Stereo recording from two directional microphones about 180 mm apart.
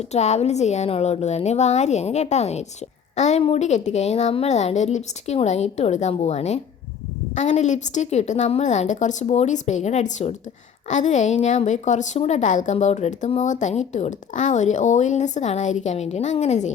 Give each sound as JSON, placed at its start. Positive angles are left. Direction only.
{"t": 0.0, "sound": "a woman's voice", "side_deg": 40}